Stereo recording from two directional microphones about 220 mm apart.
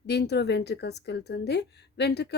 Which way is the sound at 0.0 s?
50° left (ahead or behind).